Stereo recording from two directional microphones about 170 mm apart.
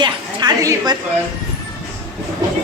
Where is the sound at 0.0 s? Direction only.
25° right (ahead or behind).